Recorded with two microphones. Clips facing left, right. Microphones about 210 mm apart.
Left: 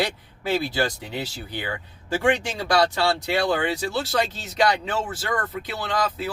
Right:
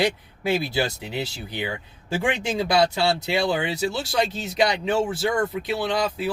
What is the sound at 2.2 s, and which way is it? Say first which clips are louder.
Speech: left 1 dB; 10° right (ahead or behind).